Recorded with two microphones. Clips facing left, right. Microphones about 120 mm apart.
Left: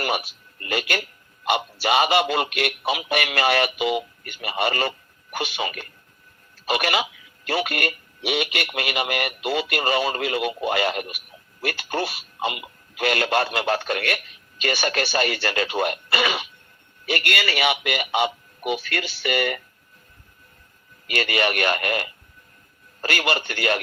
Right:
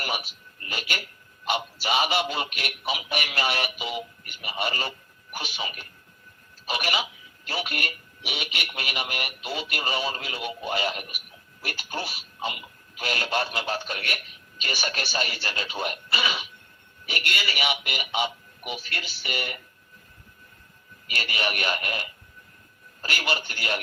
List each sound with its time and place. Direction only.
0.6 s speech: 70° left (ahead or behind)
11.6 s speech: 70° left (ahead or behind)
17.1 s speech: 80° left
21.1 s speech: 85° left
23.0 s speech: 65° left (ahead or behind); by 23.8 s 80° left